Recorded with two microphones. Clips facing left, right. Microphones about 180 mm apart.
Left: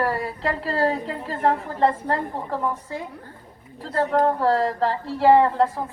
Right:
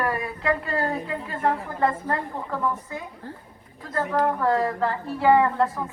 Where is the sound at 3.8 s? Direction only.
35° left (ahead or behind).